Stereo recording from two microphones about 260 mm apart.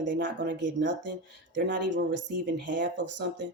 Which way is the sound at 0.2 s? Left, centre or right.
Right.